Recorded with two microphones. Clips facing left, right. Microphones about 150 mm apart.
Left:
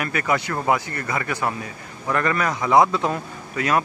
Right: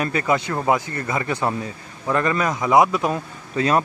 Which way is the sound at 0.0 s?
25° right (ahead or behind).